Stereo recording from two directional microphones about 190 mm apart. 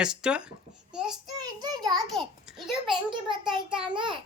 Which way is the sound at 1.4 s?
20° right (ahead or behind).